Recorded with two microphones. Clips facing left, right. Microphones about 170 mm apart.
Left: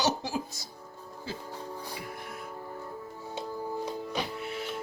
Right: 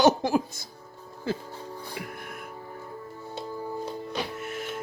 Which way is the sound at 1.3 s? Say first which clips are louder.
Right 9 dB; 55° right (ahead or behind).